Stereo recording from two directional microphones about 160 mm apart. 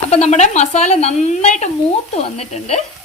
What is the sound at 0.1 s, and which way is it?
Speech, 45° left (ahead or behind).